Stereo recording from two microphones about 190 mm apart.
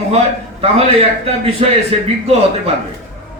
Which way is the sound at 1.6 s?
35° right (ahead or behind).